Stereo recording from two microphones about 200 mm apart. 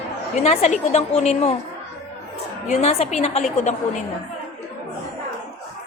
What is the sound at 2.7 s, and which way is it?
A woman's voice, 30° left (ahead or behind).